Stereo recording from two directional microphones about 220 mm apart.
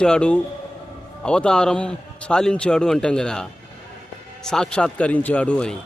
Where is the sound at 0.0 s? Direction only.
5° left (ahead or behind).